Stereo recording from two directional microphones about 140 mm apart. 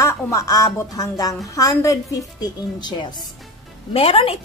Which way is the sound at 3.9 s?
45° left (ahead or behind).